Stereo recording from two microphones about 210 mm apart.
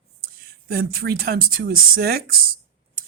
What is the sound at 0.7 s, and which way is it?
Speech, 45° right (ahead or behind).